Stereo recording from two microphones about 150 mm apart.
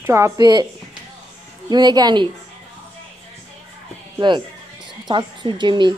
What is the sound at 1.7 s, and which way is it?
Speech, 30° right (ahead or behind).